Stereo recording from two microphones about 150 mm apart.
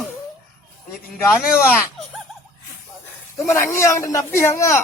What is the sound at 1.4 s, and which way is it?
Speech, 5° right (ahead or behind).